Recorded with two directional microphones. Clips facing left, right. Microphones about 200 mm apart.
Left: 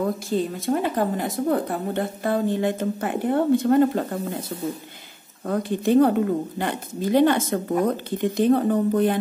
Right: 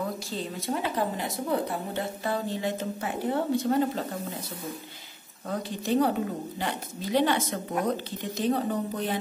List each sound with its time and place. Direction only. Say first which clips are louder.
0.3 s a woman's voice: left 8 dB; 50° left (ahead or behind)
5.5 s a woman's voice: left 8 dB; 55° left (ahead or behind)